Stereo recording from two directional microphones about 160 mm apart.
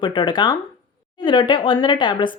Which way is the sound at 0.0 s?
30° left (ahead or behind).